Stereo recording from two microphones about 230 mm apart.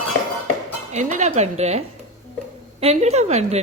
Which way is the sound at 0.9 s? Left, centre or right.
Right.